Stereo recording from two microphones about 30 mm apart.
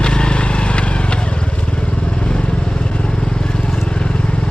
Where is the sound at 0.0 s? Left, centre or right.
Left.